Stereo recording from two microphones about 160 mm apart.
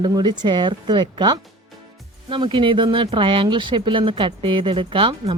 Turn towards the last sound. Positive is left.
turn(degrees=-35)  # may be behind; listen again after turning